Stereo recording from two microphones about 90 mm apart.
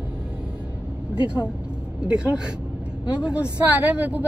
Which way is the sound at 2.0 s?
10° right (ahead or behind).